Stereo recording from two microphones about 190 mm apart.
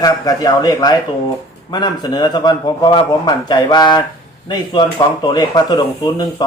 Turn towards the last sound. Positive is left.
turn(degrees=20)  # may be behind; listen again after turning